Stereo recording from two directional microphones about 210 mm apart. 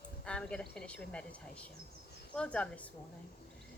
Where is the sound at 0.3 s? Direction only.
5° left (ahead or behind).